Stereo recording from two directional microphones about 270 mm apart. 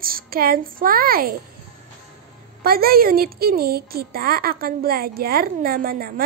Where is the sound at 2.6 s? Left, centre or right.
Right.